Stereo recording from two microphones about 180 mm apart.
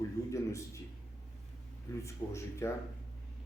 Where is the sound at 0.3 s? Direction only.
15° left (ahead or behind).